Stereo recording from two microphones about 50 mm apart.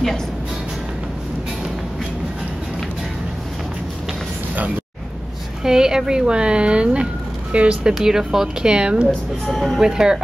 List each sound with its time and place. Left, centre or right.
5.6 s speech: centre
7.9 s speech: centre
9.5 s speech: centre
9.8 s speech: centre